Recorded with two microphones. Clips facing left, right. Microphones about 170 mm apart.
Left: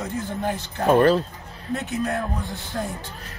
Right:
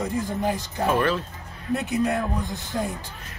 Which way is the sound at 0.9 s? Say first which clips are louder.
Left 7 dB; 40° left (ahead or behind).